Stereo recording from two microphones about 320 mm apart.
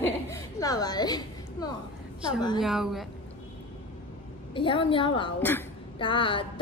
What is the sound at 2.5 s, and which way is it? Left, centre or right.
Speech, centre.